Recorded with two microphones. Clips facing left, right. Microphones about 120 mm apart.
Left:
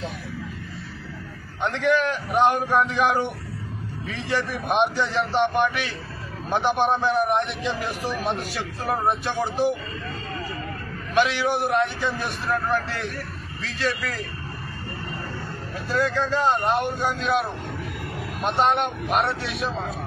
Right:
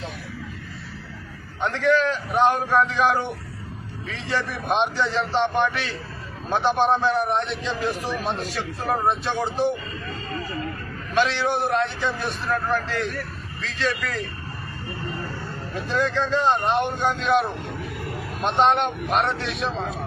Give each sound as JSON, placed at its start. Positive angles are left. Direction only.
{"t": 1.6, "sound": "a man's voice", "side_deg": 15}
{"t": 11.1, "sound": "a man's voice", "side_deg": 15}
{"t": 15.7, "sound": "a man's voice", "side_deg": 5}
{"t": 18.7, "sound": "a man's voice", "side_deg": 5}